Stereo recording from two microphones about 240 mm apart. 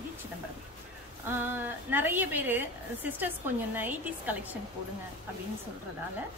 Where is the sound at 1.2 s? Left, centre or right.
Centre.